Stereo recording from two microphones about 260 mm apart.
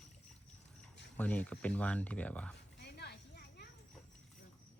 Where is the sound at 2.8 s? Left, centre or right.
Left.